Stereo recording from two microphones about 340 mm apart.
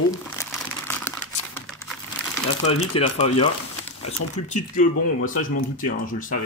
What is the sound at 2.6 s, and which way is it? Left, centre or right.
Speech, centre.